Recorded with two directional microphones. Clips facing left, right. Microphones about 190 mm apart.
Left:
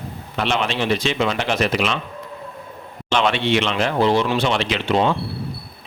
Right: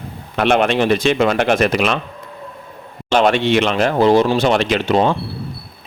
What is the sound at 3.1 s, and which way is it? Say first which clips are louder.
Speech: right 5 dB; 45° right (ahead or behind).